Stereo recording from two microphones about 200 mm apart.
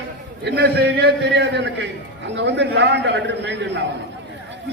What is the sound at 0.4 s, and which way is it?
A man's voice, 55° right (ahead or behind).